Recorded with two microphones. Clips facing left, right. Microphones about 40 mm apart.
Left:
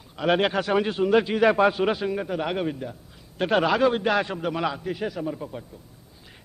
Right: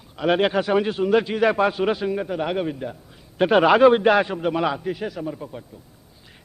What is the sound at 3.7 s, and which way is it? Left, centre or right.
Speech, right.